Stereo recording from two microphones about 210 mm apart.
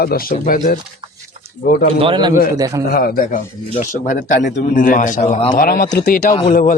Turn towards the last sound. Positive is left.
turn(degrees=40)  # may be behind; listen again after turning